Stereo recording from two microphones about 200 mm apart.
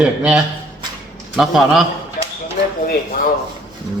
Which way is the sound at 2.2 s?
40° left (ahead or behind).